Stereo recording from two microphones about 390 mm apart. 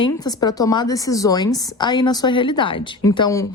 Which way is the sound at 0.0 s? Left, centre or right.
Centre.